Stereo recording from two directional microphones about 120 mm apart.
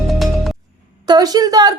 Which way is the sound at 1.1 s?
35° right (ahead or behind).